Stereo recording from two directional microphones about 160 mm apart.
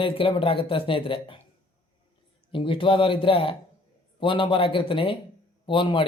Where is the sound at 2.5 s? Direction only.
30° left (ahead or behind).